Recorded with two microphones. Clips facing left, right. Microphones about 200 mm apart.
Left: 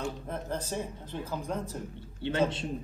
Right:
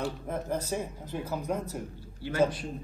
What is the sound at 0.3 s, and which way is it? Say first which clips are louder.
Speech: right 3 dB; 10° right (ahead or behind).